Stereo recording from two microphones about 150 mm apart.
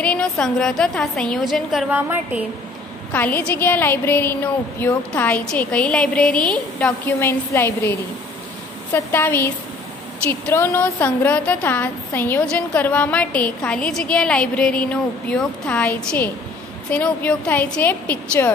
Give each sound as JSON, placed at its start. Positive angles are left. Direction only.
{"t": 0.0, "sound": "a woman's voice", "side_deg": 5}
{"t": 1.9, "sound": "a woman's voice", "side_deg": -10}
{"t": 3.1, "sound": "a woman's voice", "side_deg": 10}
{"t": 8.9, "sound": "a woman's voice", "side_deg": 15}
{"t": 10.5, "sound": "a woman's voice", "side_deg": 15}